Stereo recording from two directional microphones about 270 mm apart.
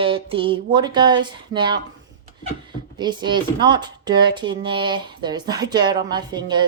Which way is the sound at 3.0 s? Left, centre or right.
Centre.